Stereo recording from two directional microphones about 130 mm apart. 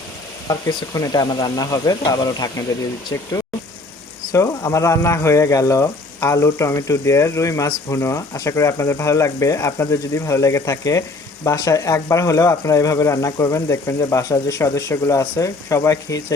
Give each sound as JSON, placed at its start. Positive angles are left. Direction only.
{"t": 0.4, "sound": "speech", "side_deg": 30}
{"t": 4.3, "sound": "speech", "side_deg": 25}